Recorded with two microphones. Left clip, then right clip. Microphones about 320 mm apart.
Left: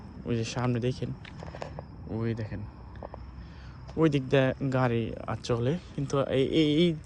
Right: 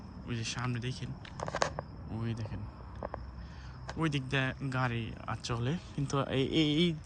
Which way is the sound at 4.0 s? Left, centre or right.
Centre.